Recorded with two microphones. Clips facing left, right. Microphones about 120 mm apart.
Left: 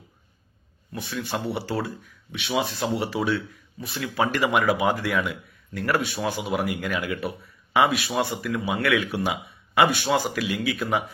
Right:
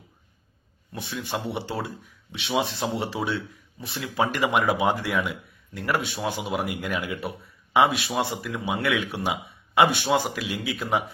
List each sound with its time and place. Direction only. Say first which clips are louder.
0.9 s speech: left 1 dB; 20° right (ahead or behind)